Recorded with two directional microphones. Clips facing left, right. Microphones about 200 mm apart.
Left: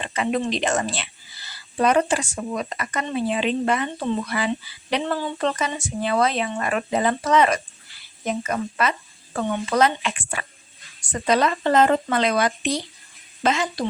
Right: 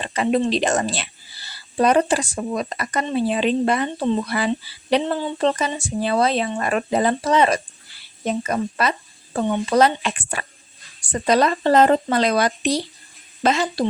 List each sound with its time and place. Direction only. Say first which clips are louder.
0.0 s speech: right 4 dB; 35° right (ahead or behind)